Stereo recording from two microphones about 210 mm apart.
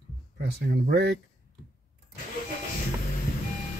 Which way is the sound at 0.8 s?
50° right (ahead or behind).